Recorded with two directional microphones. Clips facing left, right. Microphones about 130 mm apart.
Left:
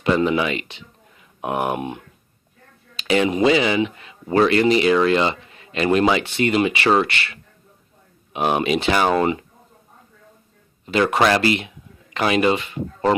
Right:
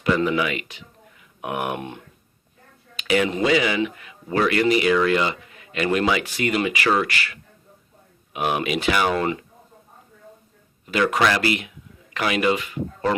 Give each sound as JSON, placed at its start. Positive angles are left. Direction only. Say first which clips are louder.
{"t": 0.0, "sound": "a man's voice", "louder": "left 2 dB", "side_deg": 25}
{"t": 2.9, "sound": "a sound", "louder": "left 2 dB", "side_deg": 30}
{"t": 3.4, "sound": "a man's voice", "louder": "left 3 dB", "side_deg": 25}
{"t": 10.9, "sound": "a man's voice", "louder": "left 3 dB", "side_deg": 30}